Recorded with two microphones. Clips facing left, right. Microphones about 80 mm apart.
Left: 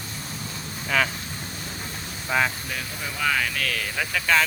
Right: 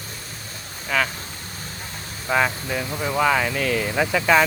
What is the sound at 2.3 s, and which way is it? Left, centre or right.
Speech, centre.